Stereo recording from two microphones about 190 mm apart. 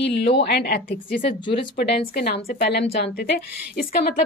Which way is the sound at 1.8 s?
60° left (ahead or behind).